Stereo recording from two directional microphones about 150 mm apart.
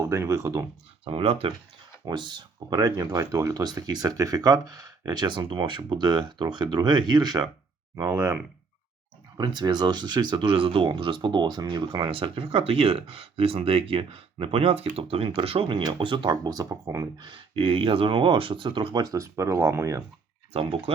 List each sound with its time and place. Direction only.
0.0 s speech: 20° right (ahead or behind)
1.0 s speech: 40° right (ahead or behind); by 8.4 s 20° right (ahead or behind)
9.4 s speech: 30° right (ahead or behind)
17.2 s speech: 35° right (ahead or behind)
20.5 s speech: 40° right (ahead or behind)